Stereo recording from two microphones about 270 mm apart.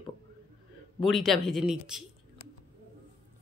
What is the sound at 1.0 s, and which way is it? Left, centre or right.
Speech, centre.